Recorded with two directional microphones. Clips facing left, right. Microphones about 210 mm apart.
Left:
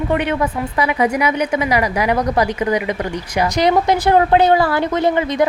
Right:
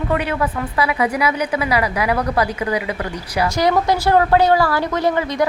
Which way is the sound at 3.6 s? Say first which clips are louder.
Left 2 dB; 20° left (ahead or behind).